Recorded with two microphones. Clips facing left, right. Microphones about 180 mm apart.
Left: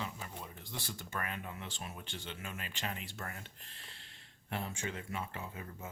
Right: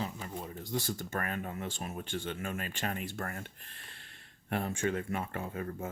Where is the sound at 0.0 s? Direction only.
40° right (ahead or behind).